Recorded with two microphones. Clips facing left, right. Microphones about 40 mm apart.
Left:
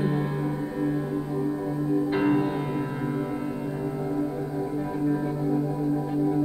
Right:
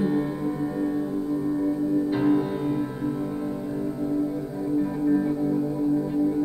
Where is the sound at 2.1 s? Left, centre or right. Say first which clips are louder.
Right 1 dB; left.